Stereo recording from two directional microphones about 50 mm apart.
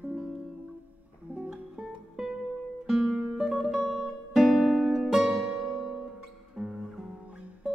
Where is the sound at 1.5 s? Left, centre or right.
Centre.